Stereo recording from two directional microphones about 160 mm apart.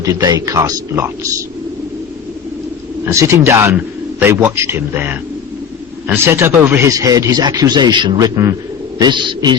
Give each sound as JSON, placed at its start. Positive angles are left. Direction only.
{"t": 0.0, "sound": "speech", "side_deg": -20}
{"t": 3.1, "sound": "a man's voice", "side_deg": -15}